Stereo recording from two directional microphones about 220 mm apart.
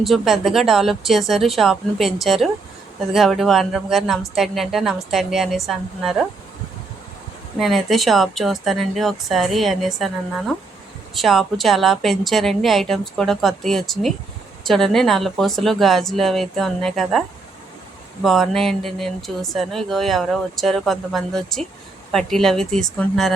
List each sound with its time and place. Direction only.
0.0 s speech: centre (ahead or behind)
7.6 s speech: centre (ahead or behind)